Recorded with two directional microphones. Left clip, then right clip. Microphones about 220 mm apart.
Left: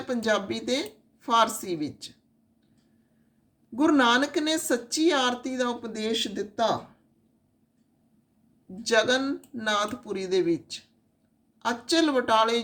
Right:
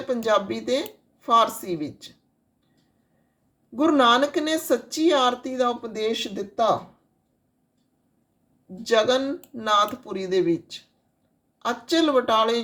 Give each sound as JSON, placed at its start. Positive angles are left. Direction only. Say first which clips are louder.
{"t": 0.1, "sound": "speech", "louder": "right 4 dB", "side_deg": 5}
{"t": 3.8, "sound": "speech", "louder": "right 3 dB", "side_deg": 5}
{"t": 8.8, "sound": "speech", "louder": "right 3 dB", "side_deg": 5}